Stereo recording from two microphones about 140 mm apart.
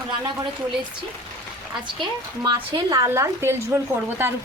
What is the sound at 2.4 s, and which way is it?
A woman's voice, 30° right (ahead or behind).